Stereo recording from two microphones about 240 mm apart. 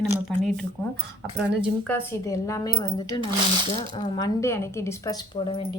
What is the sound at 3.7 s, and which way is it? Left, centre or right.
Speech, left.